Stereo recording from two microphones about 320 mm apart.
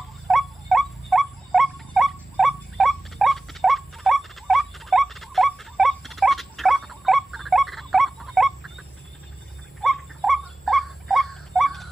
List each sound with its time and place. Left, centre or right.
0.3 s rodents: centre
9.8 s dog: centre